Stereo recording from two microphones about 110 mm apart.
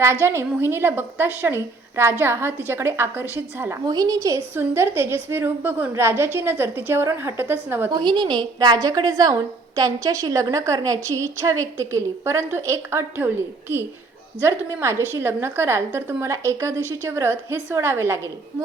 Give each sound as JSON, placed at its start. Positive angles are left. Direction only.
{"t": 0.0, "sound": "a woman's voice", "side_deg": -20}
{"t": 3.8, "sound": "a woman's voice", "side_deg": -35}
{"t": 7.9, "sound": "a woman's voice", "side_deg": -45}